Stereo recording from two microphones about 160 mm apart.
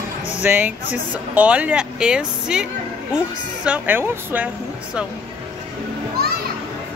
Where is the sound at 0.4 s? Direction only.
10° right (ahead or behind).